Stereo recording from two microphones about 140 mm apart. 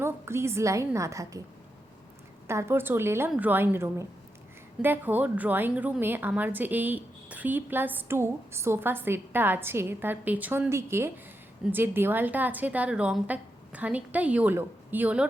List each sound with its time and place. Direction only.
0.0 s a woman's voice: 20° right (ahead or behind)
2.5 s a woman's voice: 20° right (ahead or behind)